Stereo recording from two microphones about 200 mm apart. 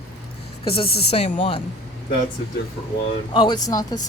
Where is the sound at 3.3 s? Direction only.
25° left (ahead or behind).